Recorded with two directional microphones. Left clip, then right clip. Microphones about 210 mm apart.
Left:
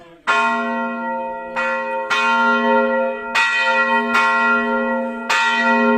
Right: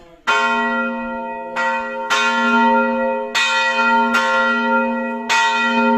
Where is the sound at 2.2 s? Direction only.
50° right (ahead or behind).